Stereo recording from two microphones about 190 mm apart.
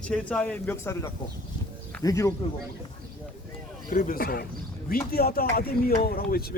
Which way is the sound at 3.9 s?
45° left (ahead or behind).